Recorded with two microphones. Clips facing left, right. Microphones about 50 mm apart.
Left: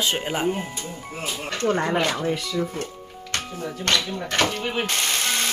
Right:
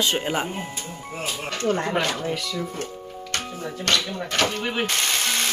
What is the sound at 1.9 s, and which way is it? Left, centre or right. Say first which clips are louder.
Speech: left 2 dB; centre.